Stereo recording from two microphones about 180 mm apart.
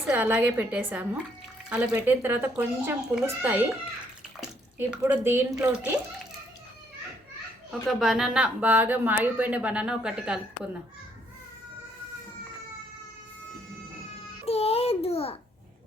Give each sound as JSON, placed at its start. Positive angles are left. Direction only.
{"t": 0.0, "sound": "speech", "side_deg": -5}
{"t": 4.8, "sound": "speech", "side_deg": -10}
{"t": 7.7, "sound": "speech", "side_deg": 0}
{"t": 14.4, "sound": "a child's voice", "side_deg": 35}